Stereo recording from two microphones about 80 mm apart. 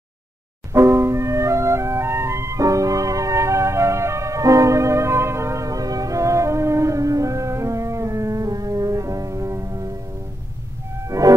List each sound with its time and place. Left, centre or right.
0.7 s music: right
11.1 s music: right